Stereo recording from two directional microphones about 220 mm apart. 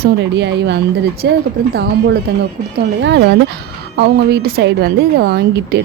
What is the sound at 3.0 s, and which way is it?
Speech, 55° right (ahead or behind).